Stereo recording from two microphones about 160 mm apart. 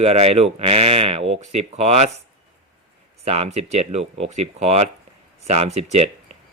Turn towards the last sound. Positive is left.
turn(degrees=-45)  # may be behind; listen again after turning